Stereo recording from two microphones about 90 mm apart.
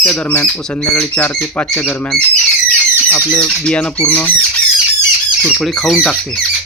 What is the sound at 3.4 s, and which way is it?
Speech, 10° left (ahead or behind).